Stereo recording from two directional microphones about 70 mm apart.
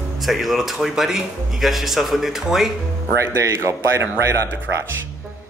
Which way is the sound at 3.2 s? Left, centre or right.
Right.